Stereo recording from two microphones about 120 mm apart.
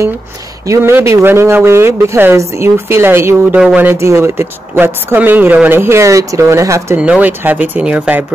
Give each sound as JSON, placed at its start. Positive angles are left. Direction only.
{"t": 0.7, "sound": "speech", "side_deg": -25}
{"t": 7.0, "sound": "speech", "side_deg": -10}